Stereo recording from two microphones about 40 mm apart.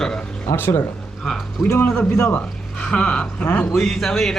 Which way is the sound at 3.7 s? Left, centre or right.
Centre.